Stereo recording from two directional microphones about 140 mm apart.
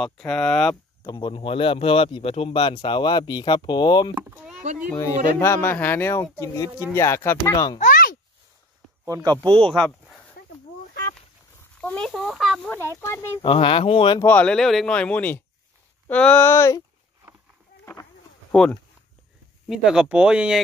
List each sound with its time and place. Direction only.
0.0 s speech: 5° left (ahead or behind)
1.1 s speech: 35° left (ahead or behind)
4.1 s speech: 15° right (ahead or behind)
4.9 s speech: 20° left (ahead or behind)
7.8 s a sound: 85° left
9.0 s speech: 25° right (ahead or behind)
9.5 s speech: 5° left (ahead or behind)
11.8 s speech: 10° left (ahead or behind)
12.1 s speech: centre (ahead or behind)
13.0 s speech: 20° left (ahead or behind)
13.4 s speech: 40° left (ahead or behind)
14.2 s speech: 10° left (ahead or behind)
18.5 s speech: 5° left (ahead or behind)